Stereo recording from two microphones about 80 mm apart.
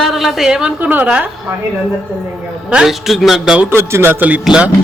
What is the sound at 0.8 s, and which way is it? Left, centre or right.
Speech, right.